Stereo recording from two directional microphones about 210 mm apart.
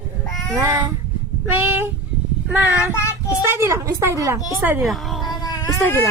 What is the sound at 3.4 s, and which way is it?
A woman's voice, 10° right (ahead or behind).